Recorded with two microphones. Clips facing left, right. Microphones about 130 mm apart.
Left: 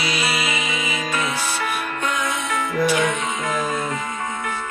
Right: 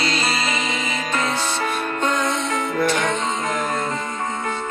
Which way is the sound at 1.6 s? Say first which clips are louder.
Right 2 dB; 30° right (ahead or behind).